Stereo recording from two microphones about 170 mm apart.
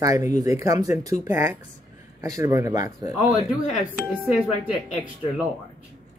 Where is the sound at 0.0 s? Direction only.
20° right (ahead or behind).